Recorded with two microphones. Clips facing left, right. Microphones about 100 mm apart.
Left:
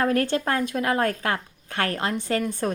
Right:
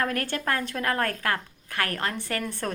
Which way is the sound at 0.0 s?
25° left (ahead or behind).